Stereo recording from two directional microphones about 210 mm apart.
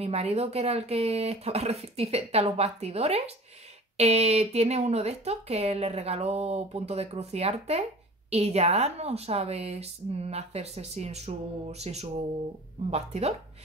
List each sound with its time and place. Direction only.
0.0 s speech: 30° right (ahead or behind)